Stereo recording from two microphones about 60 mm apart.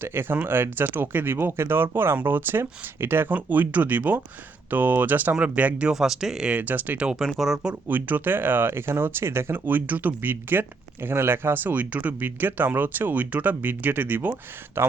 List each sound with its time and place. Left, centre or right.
0.0 s speech: right
5.9 s speech: centre
6.5 s speech: right
7.2 s speech: centre
7.9 s speech: right